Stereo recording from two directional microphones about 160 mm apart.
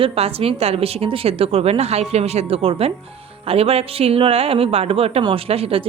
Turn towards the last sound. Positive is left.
turn(degrees=-35)  # may be behind; listen again after turning